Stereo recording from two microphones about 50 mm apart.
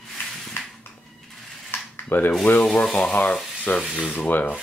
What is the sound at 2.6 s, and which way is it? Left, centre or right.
Speech, left.